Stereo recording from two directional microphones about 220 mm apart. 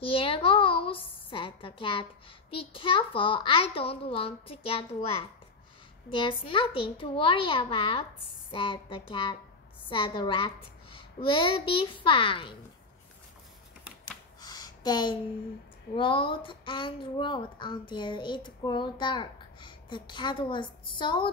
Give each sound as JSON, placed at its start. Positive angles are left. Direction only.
{"t": 0.1, "sound": "a woman's voice", "side_deg": 25}
{"t": 14.4, "sound": "a sound", "side_deg": 15}
{"t": 16.0, "sound": "speech", "side_deg": 25}